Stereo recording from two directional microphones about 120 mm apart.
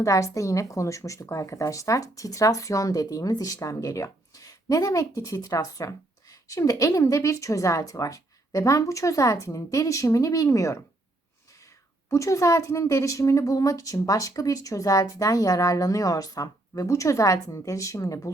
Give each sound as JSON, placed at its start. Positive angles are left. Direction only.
{"t": 0.0, "sound": "a woman's voice", "side_deg": 25}
{"t": 12.1, "sound": "a woman's voice", "side_deg": 25}